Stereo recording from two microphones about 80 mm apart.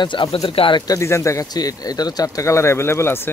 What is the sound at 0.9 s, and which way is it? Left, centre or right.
Speech, left.